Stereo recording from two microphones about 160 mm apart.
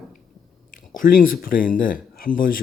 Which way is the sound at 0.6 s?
55° left (ahead or behind).